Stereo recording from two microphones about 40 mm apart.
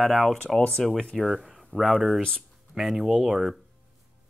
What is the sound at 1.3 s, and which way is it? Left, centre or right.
Speech, centre.